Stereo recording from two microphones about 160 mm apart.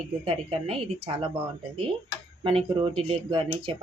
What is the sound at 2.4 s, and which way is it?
Speech, 30° right (ahead or behind).